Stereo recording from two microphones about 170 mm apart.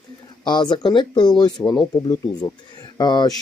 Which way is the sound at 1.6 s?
10° left (ahead or behind).